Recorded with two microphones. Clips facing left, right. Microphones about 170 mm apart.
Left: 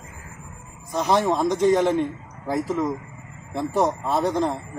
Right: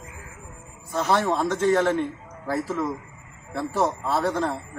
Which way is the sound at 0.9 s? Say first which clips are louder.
Left 2 dB; 15° left (ahead or behind).